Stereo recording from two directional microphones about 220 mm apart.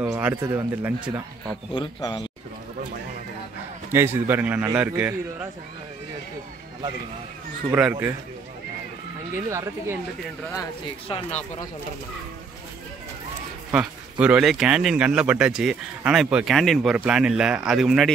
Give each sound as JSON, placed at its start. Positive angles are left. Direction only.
{"t": 0.0, "sound": "a man's voice", "side_deg": -10}
{"t": 1.7, "sound": "speech", "side_deg": 20}
{"t": 3.9, "sound": "a man's voice", "side_deg": -10}
{"t": 7.7, "sound": "a man's voice", "side_deg": -10}
{"t": 9.3, "sound": "a man's voice", "side_deg": -10}
{"t": 10.5, "sound": "speech", "side_deg": 20}
{"t": 13.7, "sound": "speech", "side_deg": -5}